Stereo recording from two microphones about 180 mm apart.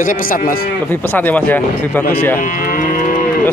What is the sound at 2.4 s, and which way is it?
Moo, 50° left (ahead or behind).